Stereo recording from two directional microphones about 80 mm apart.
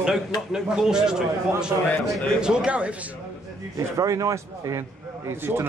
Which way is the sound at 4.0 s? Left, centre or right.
Right.